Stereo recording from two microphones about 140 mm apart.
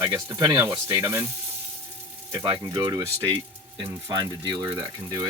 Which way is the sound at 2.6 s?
25° right (ahead or behind).